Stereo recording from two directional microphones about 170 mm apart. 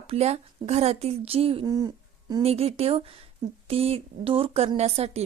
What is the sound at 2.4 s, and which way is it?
A woman's voice, 35° right (ahead or behind).